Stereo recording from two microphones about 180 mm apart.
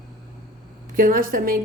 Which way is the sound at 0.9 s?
50° right (ahead or behind).